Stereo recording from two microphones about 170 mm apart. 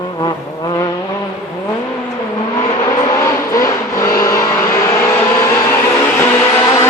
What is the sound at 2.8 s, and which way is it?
Vehicle, 20° left (ahead or behind).